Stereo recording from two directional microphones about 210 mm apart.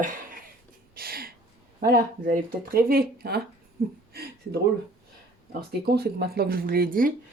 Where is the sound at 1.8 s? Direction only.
45° right (ahead or behind).